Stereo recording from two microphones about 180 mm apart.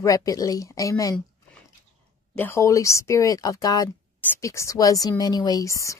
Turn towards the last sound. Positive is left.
turn(degrees=15)  # may be behind; listen again after turning